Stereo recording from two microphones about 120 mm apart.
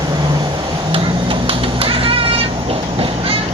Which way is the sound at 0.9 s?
50° right (ahead or behind).